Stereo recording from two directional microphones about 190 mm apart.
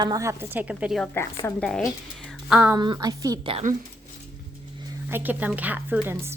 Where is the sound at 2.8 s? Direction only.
20° right (ahead or behind).